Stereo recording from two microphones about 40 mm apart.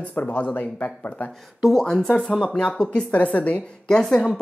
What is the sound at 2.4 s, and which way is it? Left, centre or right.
Speech, left.